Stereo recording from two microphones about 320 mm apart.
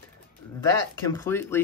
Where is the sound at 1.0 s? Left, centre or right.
Centre.